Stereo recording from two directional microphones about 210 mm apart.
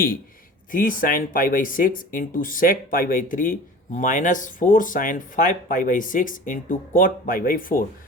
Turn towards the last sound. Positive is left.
turn(degrees=40)  # may be behind; listen again after turning